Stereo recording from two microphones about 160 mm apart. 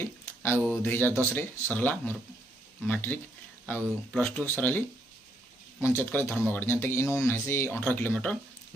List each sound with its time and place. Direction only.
0.0 s speech: 15° left (ahead or behind)